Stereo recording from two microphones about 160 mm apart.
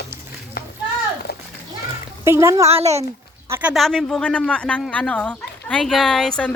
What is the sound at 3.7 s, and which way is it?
Speech, centre (ahead or behind).